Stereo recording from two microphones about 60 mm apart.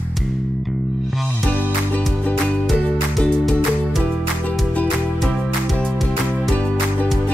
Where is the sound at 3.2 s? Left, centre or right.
Centre.